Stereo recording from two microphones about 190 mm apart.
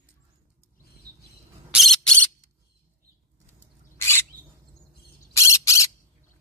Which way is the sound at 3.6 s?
10° left (ahead or behind).